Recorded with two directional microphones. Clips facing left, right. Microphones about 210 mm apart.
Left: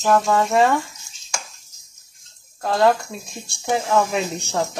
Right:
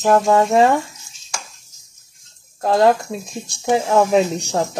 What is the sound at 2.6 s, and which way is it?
Speech, 40° right (ahead or behind).